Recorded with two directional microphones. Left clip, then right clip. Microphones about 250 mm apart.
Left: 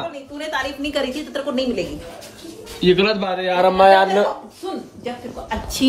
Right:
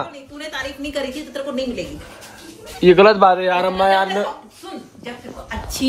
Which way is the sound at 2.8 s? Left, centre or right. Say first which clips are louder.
Right 7 dB; right.